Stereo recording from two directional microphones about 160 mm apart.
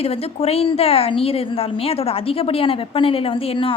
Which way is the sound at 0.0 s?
40° left (ahead or behind).